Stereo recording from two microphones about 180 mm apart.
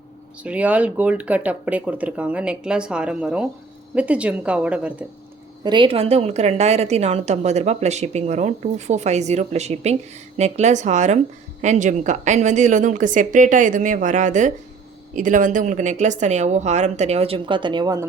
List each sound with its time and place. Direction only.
0.4 s speech: 5° right (ahead or behind)
5.6 s a woman's voice: 25° right (ahead or behind)